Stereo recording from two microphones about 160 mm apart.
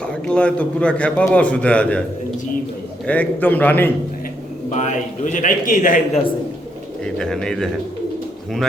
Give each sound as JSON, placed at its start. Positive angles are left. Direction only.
{"t": 0.3, "sound": "a man's voice", "side_deg": 5}
{"t": 3.1, "sound": "a man's voice", "side_deg": 10}
{"t": 4.7, "sound": "a man's voice", "side_deg": 50}
{"t": 7.0, "sound": "speech", "side_deg": 5}